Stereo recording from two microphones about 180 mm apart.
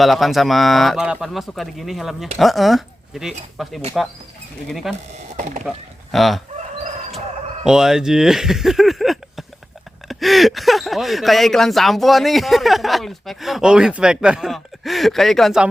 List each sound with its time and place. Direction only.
0.0 s speech: centre (ahead or behind)
5.4 s speech: 40° right (ahead or behind)
5.6 s speech: centre (ahead or behind)
7.6 s speech: 5° right (ahead or behind)